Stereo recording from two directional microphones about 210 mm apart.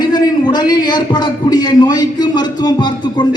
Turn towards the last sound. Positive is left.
turn(degrees=20)  # may be behind; listen again after turning